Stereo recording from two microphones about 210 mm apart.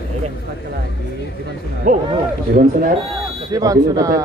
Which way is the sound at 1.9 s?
35° right (ahead or behind).